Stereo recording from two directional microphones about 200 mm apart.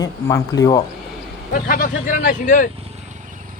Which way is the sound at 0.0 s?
15° left (ahead or behind).